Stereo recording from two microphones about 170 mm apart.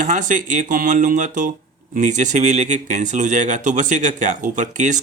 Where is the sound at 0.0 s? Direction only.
50° right (ahead or behind).